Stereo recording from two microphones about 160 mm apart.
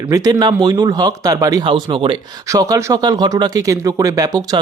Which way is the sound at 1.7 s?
30° right (ahead or behind).